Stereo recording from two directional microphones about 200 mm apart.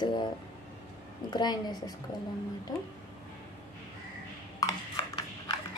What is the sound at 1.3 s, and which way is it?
Speech, 20° left (ahead or behind).